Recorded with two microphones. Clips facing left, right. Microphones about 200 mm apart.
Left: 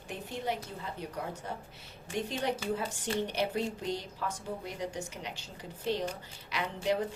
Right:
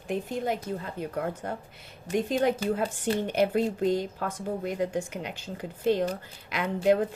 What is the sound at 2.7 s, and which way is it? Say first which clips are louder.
A woman's voice: right 6 dB; 50° right (ahead or behind).